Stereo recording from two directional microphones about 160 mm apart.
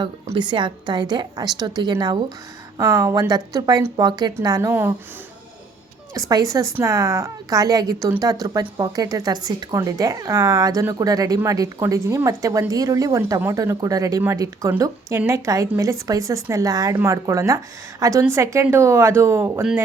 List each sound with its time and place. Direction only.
0.3 s a woman's voice: 30° right (ahead or behind)
6.1 s a woman's voice: 20° right (ahead or behind)